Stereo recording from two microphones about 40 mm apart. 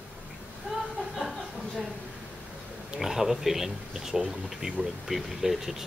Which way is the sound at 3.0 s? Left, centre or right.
Centre.